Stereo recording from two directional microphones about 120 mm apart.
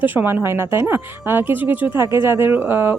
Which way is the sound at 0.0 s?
15° right (ahead or behind).